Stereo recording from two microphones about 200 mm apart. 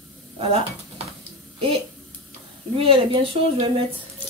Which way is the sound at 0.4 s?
30° right (ahead or behind).